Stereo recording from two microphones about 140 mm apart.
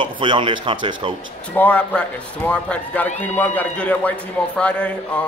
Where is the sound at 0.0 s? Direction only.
35° right (ahead or behind).